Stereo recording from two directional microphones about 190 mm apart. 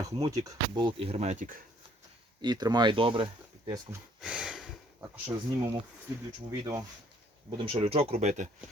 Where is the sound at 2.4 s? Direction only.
20° right (ahead or behind).